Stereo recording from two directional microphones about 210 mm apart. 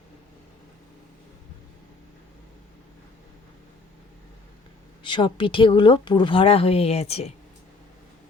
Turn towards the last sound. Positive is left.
turn(degrees=30)  # may be behind; listen again after turning